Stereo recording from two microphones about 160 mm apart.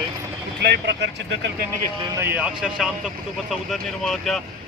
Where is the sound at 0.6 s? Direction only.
90° right.